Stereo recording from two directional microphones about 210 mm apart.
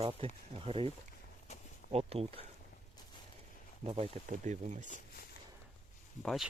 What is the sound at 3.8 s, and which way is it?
Speech, 30° right (ahead or behind).